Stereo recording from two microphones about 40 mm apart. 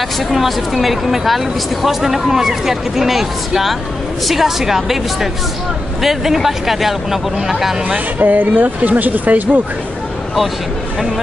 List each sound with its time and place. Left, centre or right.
0.3 s speech: centre
8.2 s speech: right